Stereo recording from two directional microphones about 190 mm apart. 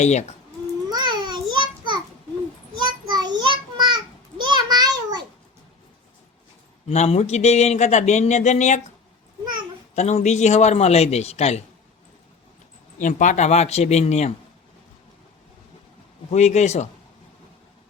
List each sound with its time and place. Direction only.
0.0 s speech: 35° left (ahead or behind)
0.9 s a sound: 20° right (ahead or behind)
6.8 s speech: 35° left (ahead or behind)
9.9 s speech: 35° left (ahead or behind)
13.0 s speech: 40° left (ahead or behind)
16.3 s speech: 35° left (ahead or behind)